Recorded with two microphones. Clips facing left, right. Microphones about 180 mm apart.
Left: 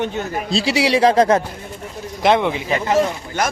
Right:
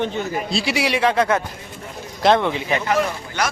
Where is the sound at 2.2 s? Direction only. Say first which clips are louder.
Left 1 dB; 15° left (ahead or behind).